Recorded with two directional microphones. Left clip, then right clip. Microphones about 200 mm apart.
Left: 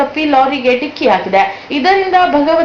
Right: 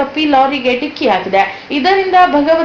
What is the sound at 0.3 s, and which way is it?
A woman's voice, 20° left (ahead or behind).